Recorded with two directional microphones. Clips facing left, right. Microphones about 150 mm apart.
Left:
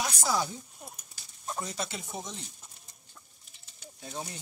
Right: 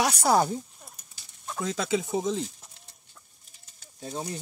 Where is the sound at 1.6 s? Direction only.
90° right.